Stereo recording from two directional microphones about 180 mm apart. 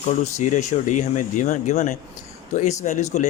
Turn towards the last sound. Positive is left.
turn(degrees=40)  # may be behind; listen again after turning